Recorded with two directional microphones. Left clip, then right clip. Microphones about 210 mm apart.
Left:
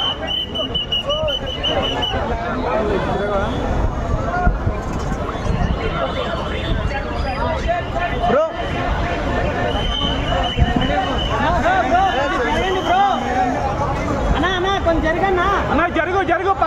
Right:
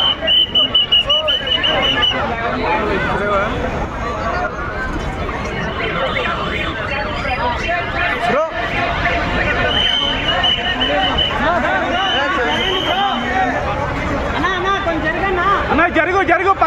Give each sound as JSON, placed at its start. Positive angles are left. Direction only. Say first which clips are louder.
{"t": 15.7, "sound": "chatter", "louder": "right 3 dB", "side_deg": -30}